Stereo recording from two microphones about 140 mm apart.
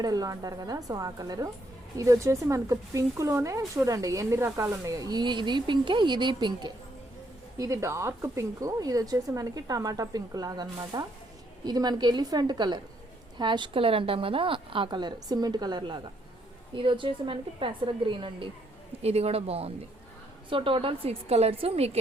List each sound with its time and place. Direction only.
0.0 s a woman's voice: 25° right (ahead or behind)
7.6 s a woman's voice: 20° right (ahead or behind); by 18.4 s 35° right (ahead or behind)
19.0 s a woman's voice: 45° right (ahead or behind)